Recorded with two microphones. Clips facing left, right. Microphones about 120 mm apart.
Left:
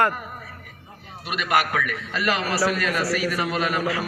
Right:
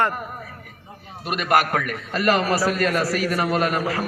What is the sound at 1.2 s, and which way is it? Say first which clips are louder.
A man's voice: right 3 dB; 45° right (ahead or behind).